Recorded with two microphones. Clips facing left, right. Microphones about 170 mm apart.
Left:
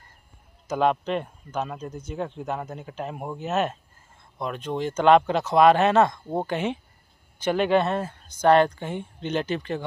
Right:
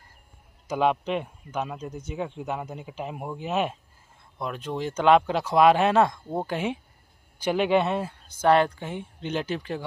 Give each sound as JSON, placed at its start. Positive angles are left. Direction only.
{"t": 0.7, "sound": "speech", "side_deg": -10}